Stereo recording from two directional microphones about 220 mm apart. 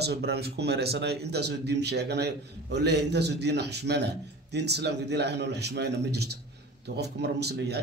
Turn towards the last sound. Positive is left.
turn(degrees=-50)  # may be behind; listen again after turning